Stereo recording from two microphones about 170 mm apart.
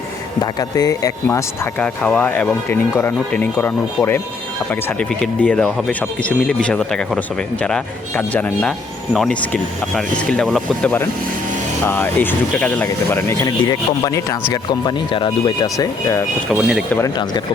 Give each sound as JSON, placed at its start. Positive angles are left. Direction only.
{"t": 0.3, "sound": "speech", "side_deg": 20}
{"t": 16.5, "sound": "speech", "side_deg": -5}